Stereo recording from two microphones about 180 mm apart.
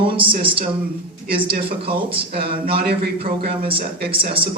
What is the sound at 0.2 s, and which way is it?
Speech, 30° right (ahead or behind).